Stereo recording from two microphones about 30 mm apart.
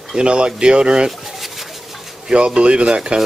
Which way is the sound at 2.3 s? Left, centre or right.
Right.